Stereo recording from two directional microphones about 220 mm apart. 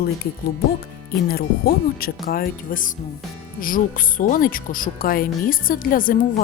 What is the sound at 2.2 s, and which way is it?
Speech, 40° left (ahead or behind).